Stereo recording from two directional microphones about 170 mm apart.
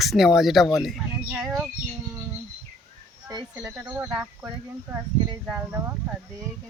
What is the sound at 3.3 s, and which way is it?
Speech, 20° right (ahead or behind).